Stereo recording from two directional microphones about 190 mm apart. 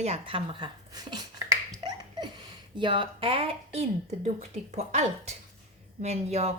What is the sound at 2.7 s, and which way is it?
Speech, 25° right (ahead or behind).